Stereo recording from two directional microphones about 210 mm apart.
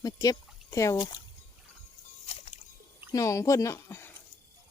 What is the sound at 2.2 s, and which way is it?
Music, 30° left (ahead or behind).